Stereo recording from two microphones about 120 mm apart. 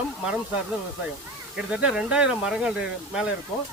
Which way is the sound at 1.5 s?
5° right (ahead or behind).